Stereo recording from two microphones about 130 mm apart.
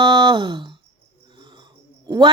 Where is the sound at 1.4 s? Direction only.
35° right (ahead or behind).